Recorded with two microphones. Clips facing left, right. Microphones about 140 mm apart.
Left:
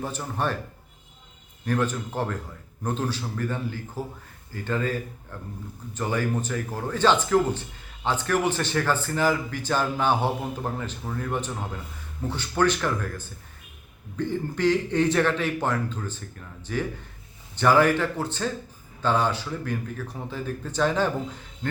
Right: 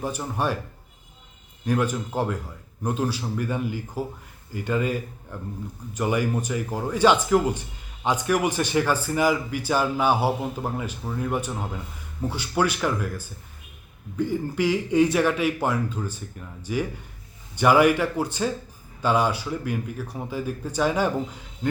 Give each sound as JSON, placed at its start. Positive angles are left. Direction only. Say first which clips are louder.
{"t": 0.0, "sound": "speech", "louder": "right 2 dB", "side_deg": -15}
{"t": 1.6, "sound": "speech", "louder": "right 2 dB", "side_deg": -10}